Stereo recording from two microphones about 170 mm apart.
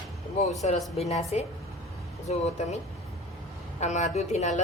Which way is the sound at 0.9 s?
40° left (ahead or behind).